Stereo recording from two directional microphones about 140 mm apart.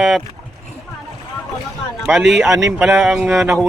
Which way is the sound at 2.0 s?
Centre (ahead or behind).